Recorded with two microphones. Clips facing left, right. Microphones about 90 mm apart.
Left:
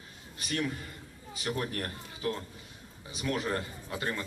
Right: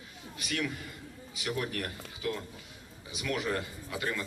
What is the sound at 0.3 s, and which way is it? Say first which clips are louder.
A man's voice: left 1 dB; 35° left (ahead or behind).